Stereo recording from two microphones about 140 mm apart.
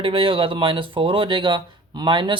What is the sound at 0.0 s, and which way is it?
Speech, 40° right (ahead or behind).